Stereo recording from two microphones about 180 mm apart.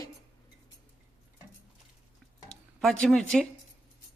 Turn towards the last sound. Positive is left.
turn(degrees=5)  # may be behind; listen again after turning